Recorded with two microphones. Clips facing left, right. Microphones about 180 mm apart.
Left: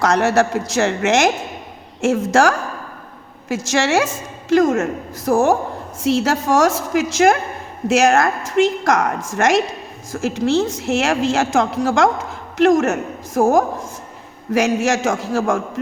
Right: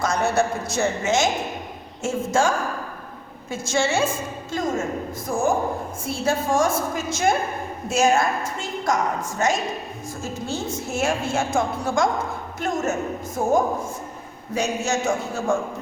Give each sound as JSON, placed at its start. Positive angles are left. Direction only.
{"t": 0.0, "sound": "a woman's voice", "side_deg": 75}
{"t": 6.0, "sound": "a woman's voice", "side_deg": 85}